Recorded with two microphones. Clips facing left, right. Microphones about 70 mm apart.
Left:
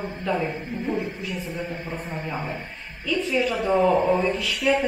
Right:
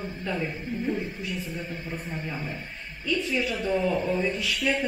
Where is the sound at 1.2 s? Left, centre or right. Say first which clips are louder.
Left 2 dB; centre.